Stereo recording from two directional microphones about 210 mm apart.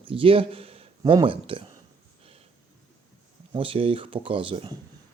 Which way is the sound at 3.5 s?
25° right (ahead or behind).